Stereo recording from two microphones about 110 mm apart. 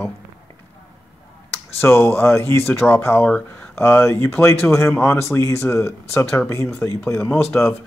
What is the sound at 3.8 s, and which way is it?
Speech, 20° left (ahead or behind).